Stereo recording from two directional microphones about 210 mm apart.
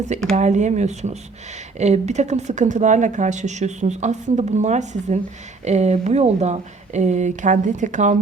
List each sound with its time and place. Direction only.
0.3 s speech: 35° right (ahead or behind)